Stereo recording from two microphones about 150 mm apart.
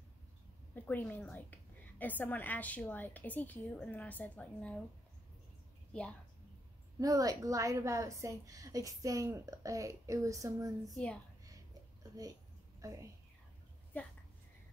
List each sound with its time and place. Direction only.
0.7 s a woman's voice: 10° left (ahead or behind)
7.0 s a woman's voice: 25° right (ahead or behind)
12.0 s a woman's voice: 25° right (ahead or behind)